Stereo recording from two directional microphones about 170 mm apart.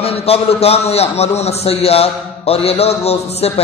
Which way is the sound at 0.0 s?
35° left (ahead or behind).